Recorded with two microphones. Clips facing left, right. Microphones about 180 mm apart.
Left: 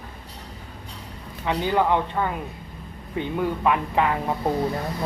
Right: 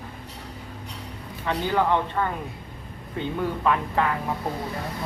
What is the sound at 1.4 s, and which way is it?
Speech, 15° left (ahead or behind).